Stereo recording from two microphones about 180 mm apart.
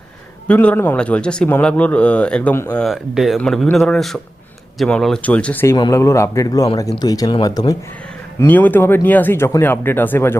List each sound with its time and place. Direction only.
0.4 s speech: 10° left (ahead or behind)
5.7 s speech: 20° left (ahead or behind)
8.4 s speech: 10° left (ahead or behind)